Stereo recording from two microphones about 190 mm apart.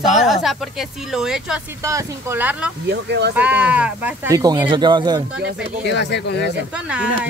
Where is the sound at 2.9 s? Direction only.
65° right (ahead or behind).